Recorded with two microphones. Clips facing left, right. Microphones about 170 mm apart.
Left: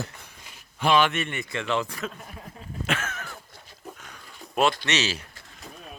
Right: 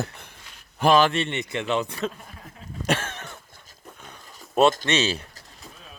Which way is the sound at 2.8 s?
35° right (ahead or behind).